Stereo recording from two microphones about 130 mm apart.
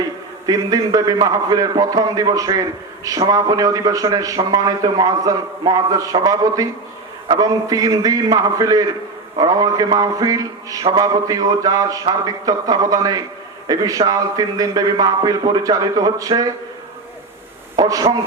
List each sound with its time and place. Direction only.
0.4 s a man's voice: 30° right (ahead or behind)
17.7 s a man's voice: 30° right (ahead or behind)